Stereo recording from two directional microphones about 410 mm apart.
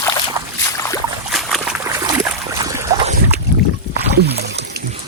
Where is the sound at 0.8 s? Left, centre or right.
Centre.